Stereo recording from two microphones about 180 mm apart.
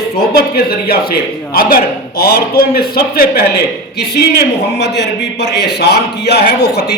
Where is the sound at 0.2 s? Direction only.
60° left (ahead or behind).